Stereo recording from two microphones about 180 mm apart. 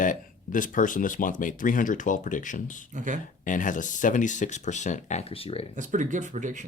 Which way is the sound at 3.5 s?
45° left (ahead or behind).